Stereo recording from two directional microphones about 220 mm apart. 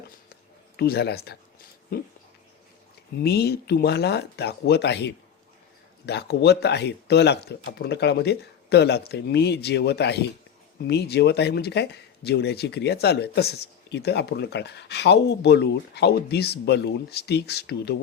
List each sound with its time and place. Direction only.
0.8 s speech: 45° left (ahead or behind)
3.2 s speech: 45° left (ahead or behind)